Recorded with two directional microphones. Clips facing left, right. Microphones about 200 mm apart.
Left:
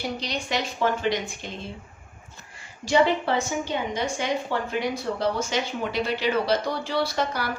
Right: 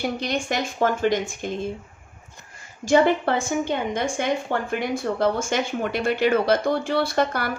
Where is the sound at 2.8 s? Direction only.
50° right (ahead or behind).